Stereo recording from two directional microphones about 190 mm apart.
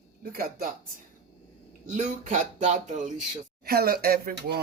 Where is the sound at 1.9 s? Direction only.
40° right (ahead or behind).